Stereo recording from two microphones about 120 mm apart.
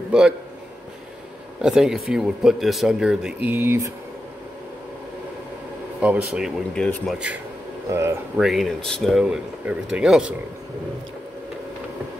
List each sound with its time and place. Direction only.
0.1 s speech: 5° right (ahead or behind)
1.6 s speech: 5° right (ahead or behind)
5.9 s speech: 10° right (ahead or behind)
6.7 s speech: 5° left (ahead or behind)
7.9 s speech: 25° right (ahead or behind)
8.4 s speech: centre (ahead or behind)
9.2 s speech: 10° right (ahead or behind)